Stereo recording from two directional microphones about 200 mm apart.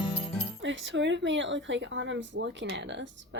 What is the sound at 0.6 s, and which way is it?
Speech, 65° right (ahead or behind).